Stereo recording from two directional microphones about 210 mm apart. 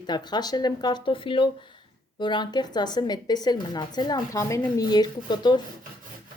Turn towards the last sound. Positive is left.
turn(degrees=20)  # may be behind; listen again after turning